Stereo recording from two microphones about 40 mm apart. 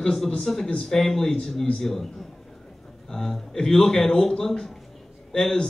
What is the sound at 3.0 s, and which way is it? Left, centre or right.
A man's voice, centre.